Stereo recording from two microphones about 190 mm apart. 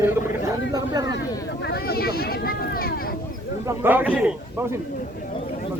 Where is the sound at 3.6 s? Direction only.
10° right (ahead or behind).